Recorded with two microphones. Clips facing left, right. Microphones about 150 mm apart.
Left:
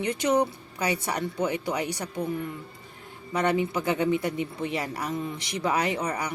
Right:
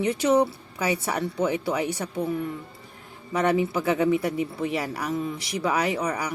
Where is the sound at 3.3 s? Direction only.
5° right (ahead or behind).